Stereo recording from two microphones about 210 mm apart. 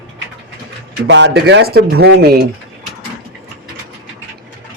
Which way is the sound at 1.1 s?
55° right (ahead or behind).